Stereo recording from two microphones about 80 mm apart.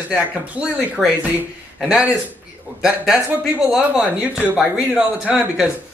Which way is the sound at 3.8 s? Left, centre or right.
Centre.